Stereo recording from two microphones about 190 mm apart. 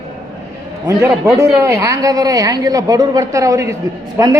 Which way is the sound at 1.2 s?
15° right (ahead or behind).